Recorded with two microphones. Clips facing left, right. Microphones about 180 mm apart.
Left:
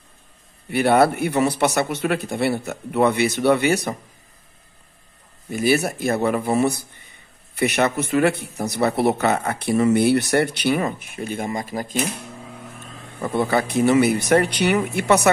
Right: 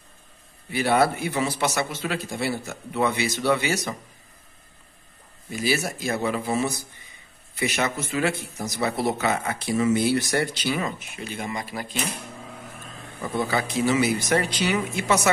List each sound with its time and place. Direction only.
0.7 s a man's voice: 60° left (ahead or behind)
5.5 s a man's voice: 55° left (ahead or behind)
13.2 s a man's voice: 60° left (ahead or behind)